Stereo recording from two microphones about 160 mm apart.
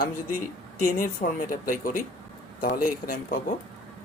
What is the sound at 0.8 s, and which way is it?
A man's voice, 60° left (ahead or behind).